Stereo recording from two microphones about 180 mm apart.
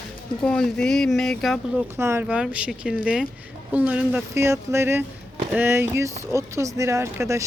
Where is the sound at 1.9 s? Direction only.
15° right (ahead or behind).